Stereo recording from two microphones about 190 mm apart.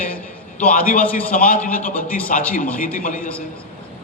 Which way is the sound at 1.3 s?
50° left (ahead or behind).